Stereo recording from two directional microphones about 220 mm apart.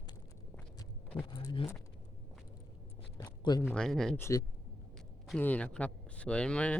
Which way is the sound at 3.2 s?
20° left (ahead or behind).